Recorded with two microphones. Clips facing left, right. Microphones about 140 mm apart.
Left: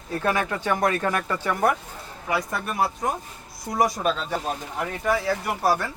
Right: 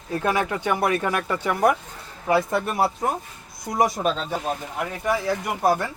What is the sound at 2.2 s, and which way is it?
Speech, 25° right (ahead or behind).